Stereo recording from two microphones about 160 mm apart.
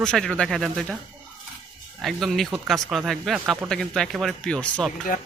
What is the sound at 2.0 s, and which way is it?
Speech, centre (ahead or behind).